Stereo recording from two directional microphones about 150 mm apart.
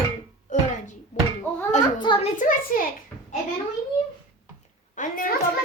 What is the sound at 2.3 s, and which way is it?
Speech, 60° left (ahead or behind).